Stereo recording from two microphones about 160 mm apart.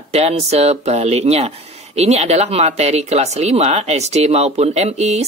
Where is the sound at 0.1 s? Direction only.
40° right (ahead or behind).